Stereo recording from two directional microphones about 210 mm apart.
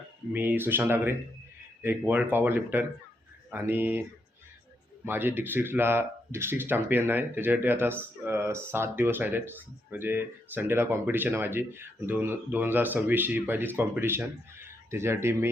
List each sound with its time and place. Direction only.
0.3 s speech: 10° right (ahead or behind)
5.0 s speech: 10° right (ahead or behind)